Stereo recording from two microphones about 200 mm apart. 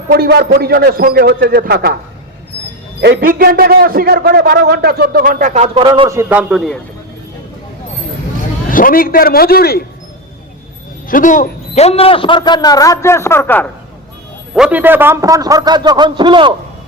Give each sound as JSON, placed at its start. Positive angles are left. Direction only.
{"t": 0.1, "sound": "a man's voice", "side_deg": -50}
{"t": 3.0, "sound": "a man's voice", "side_deg": -50}
{"t": 5.9, "sound": "a man's voice", "side_deg": -15}
{"t": 8.7, "sound": "a man's voice", "side_deg": 45}
{"t": 11.1, "sound": "a man's voice", "side_deg": 40}
{"t": 14.5, "sound": "a man's voice", "side_deg": -5}